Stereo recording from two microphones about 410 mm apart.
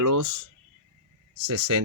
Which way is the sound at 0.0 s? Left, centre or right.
Right.